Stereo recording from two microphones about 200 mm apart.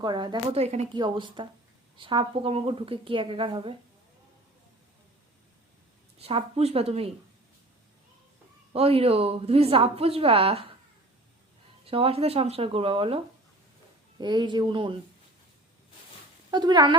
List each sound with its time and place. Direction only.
0.0 s a woman's voice: 20° right (ahead or behind)
6.1 s speech: 30° right (ahead or behind)
8.7 s a woman's voice: 30° right (ahead or behind)
11.9 s a woman's voice: 30° right (ahead or behind)
16.5 s a woman's voice: 20° right (ahead or behind)